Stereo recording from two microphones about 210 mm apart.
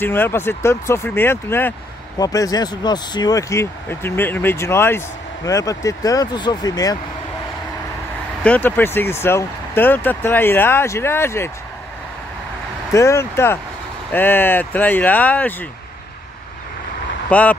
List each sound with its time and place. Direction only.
0.0 s speech: 10° left (ahead or behind)
8.5 s speech: 10° left (ahead or behind)
12.9 s speech: 15° left (ahead or behind)
17.3 s speech: 5° left (ahead or behind)